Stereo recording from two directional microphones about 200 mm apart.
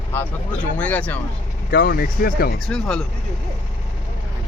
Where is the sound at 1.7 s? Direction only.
45° left (ahead or behind).